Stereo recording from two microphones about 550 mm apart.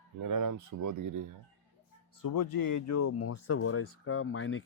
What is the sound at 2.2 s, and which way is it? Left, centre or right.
Speech, left.